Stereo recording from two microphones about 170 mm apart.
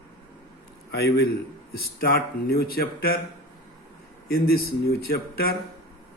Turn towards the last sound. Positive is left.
turn(degrees=65)  # may be behind; listen again after turning